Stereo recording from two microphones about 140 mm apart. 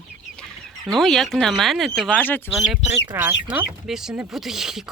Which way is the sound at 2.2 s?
15° left (ahead or behind).